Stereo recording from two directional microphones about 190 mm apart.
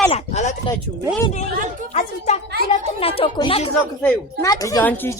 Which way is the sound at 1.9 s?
35° left (ahead or behind).